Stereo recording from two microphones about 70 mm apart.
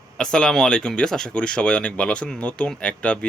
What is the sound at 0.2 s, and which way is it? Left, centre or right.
Speech, centre.